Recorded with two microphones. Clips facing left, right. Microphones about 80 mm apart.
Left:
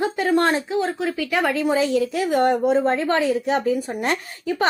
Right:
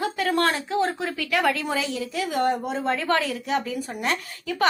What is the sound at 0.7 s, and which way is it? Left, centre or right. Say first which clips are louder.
Speech: left 2 dB; centre.